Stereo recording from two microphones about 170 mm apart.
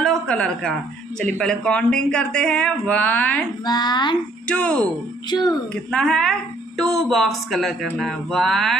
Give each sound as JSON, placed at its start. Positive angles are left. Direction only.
{"t": 0.0, "sound": "a woman's voice", "side_deg": 5}
{"t": 3.6, "sound": "a woman's voice", "side_deg": 25}
{"t": 4.5, "sound": "speech", "side_deg": 5}
{"t": 5.3, "sound": "a woman's voice", "side_deg": 20}
{"t": 5.9, "sound": "speech", "side_deg": 5}